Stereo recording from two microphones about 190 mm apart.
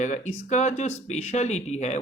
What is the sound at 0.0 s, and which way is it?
Speech, 40° left (ahead or behind).